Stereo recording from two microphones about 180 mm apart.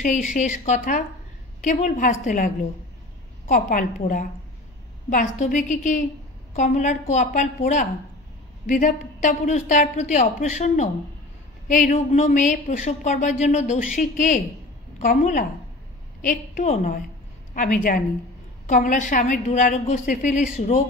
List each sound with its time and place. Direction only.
0.0 s a woman's voice: 45° left (ahead or behind)